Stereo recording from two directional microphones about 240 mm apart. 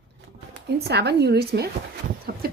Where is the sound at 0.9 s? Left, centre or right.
Right.